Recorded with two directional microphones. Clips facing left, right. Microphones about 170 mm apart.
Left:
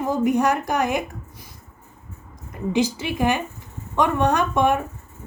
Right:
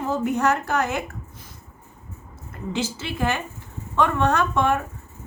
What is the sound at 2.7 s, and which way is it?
Speech, 15° left (ahead or behind).